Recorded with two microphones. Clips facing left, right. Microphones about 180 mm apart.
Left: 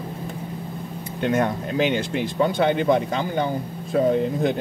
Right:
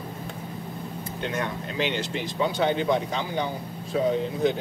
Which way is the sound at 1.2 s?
50° left (ahead or behind).